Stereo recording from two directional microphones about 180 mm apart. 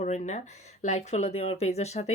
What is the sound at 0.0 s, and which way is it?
Speech, 40° left (ahead or behind).